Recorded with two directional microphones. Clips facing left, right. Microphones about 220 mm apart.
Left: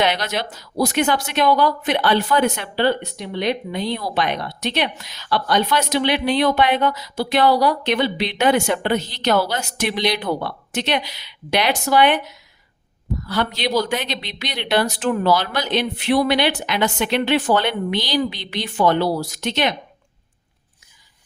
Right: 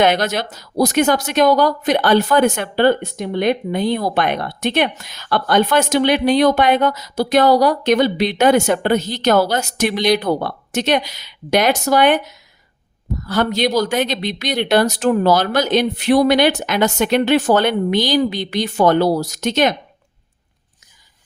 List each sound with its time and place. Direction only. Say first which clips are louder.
0.0 s speech: right 5 dB; 50° right (ahead or behind)